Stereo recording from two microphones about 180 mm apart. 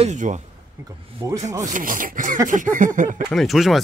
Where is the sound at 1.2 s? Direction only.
20° right (ahead or behind).